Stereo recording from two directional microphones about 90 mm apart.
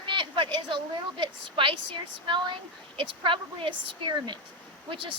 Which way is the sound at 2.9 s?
70° right (ahead or behind).